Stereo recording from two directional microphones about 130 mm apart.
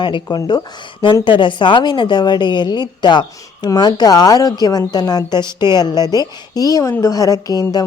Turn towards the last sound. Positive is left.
turn(degrees=30)  # may be behind; listen again after turning